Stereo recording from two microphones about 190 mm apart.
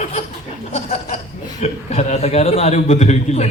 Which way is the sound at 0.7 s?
35° left (ahead or behind).